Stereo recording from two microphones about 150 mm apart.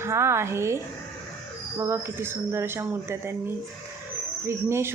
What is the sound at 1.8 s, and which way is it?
Speech, 15° right (ahead or behind).